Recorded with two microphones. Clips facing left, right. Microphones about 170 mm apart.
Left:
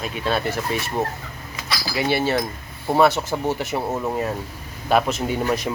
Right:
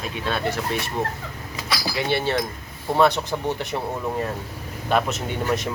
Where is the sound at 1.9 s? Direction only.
5° left (ahead or behind).